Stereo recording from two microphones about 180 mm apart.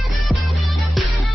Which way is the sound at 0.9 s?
Centre (ahead or behind).